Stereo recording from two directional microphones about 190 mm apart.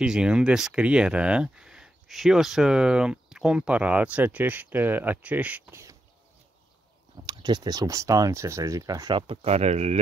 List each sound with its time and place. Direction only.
0.0 s speech: 5° right (ahead or behind)
7.2 s speech: 20° right (ahead or behind)